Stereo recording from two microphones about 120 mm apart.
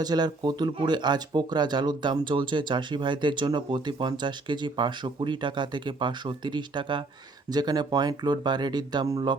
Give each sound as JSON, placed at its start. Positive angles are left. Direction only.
{"t": 0.0, "sound": "speech", "side_deg": -35}